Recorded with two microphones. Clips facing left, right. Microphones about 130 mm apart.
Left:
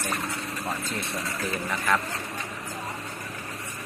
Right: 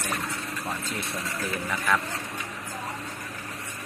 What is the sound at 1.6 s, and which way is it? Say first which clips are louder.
Speech: even; 15° left (ahead or behind).